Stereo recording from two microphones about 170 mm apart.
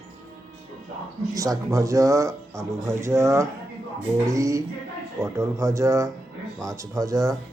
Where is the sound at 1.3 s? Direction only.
20° right (ahead or behind).